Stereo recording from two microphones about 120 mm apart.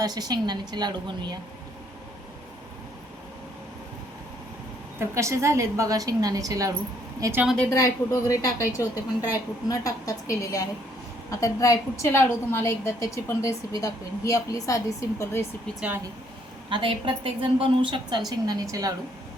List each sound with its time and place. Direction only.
0.0 s a woman's voice: 35° right (ahead or behind)
4.9 s a woman's voice: 25° right (ahead or behind)
7.7 s a woman's voice: 25° left (ahead or behind)
16.6 s a woman's voice: 45° right (ahead or behind)
18.3 s a woman's voice: 30° right (ahead or behind)